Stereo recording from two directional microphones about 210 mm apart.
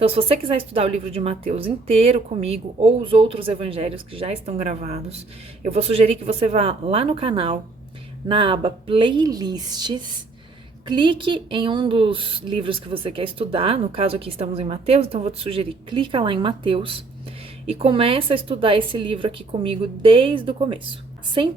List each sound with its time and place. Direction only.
0.0 s a woman's voice: 25° right (ahead or behind)